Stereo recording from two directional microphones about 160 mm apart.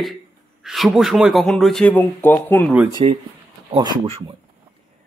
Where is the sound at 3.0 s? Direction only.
40° right (ahead or behind).